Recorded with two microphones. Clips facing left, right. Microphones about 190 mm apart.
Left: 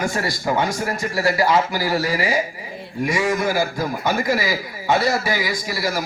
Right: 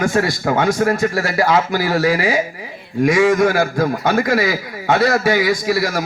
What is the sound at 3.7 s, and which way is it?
A man's voice, 60° right (ahead or behind).